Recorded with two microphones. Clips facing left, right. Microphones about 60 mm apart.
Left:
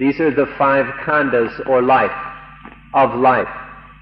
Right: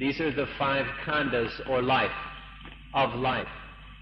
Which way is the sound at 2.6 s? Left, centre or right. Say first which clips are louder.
Left 12 dB; left.